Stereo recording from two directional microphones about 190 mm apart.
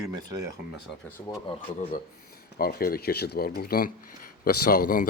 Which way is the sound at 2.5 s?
50° left (ahead or behind).